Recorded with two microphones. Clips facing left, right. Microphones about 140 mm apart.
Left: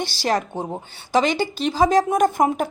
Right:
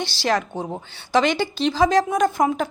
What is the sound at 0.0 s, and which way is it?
Speech, 45° left (ahead or behind).